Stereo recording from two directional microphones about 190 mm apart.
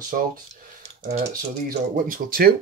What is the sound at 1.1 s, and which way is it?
Speech, 40° right (ahead or behind).